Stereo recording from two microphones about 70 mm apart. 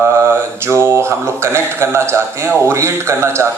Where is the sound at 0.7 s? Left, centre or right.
Right.